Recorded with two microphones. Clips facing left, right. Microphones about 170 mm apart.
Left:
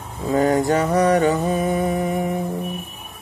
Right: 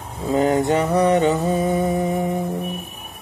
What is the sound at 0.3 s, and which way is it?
Mantra, 20° right (ahead or behind).